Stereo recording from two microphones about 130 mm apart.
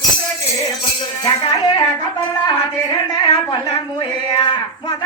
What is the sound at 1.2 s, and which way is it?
Speech, 35° left (ahead or behind).